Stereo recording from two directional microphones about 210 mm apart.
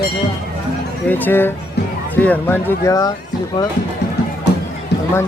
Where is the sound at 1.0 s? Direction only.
10° left (ahead or behind).